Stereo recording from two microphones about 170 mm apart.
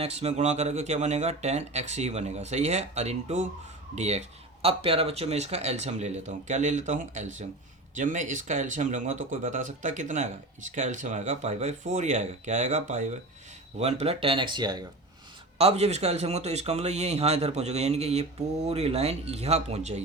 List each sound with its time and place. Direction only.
0.0 s speech: 40° right (ahead or behind)
15.5 s speech: 35° right (ahead or behind)